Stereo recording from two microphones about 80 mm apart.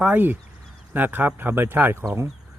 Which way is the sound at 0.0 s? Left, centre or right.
Right.